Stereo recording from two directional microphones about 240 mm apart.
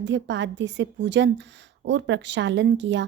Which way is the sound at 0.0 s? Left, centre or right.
Right.